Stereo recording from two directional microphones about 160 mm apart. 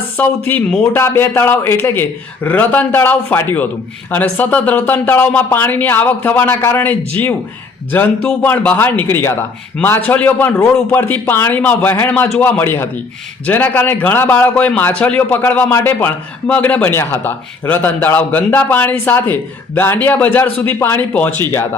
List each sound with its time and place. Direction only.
0.2 s a man's voice: 10° left (ahead or behind)